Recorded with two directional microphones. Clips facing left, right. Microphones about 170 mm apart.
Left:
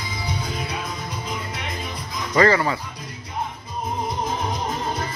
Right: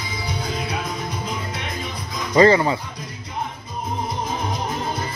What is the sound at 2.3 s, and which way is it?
Speech, 20° right (ahead or behind).